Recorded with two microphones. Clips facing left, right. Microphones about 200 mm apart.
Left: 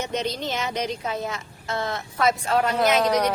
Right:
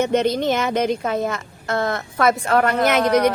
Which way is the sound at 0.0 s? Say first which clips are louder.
Right 9 dB; 55° right (ahead or behind).